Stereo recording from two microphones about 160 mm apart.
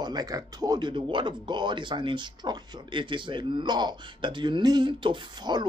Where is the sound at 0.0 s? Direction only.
25° right (ahead or behind).